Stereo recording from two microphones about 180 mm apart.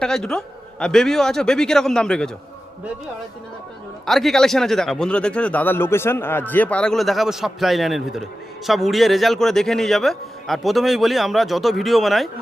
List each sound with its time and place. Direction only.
0.0 s a man's voice: 5° left (ahead or behind)
4.0 s a man's voice: centre (ahead or behind)